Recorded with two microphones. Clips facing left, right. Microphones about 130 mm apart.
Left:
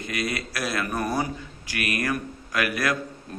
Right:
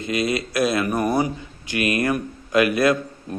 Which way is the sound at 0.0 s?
25° right (ahead or behind).